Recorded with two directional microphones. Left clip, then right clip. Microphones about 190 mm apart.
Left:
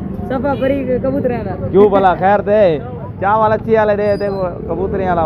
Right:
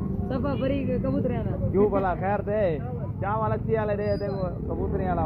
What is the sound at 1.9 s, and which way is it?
Speech, 50° left (ahead or behind).